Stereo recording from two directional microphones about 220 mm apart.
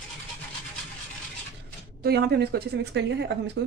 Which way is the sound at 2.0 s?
45° right (ahead or behind).